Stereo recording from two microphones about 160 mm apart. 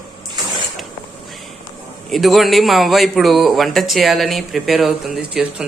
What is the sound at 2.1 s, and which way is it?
A man's voice, centre (ahead or behind).